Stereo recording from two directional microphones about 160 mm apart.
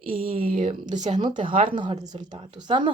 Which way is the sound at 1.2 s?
30° right (ahead or behind).